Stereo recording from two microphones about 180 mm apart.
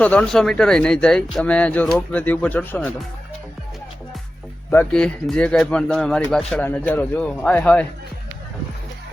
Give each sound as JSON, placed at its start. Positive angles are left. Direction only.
{"t": 0.0, "sound": "speech", "side_deg": 5}
{"t": 4.7, "sound": "speech", "side_deg": 10}